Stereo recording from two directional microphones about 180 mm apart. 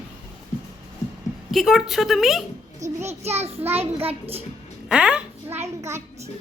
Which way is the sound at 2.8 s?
40° right (ahead or behind).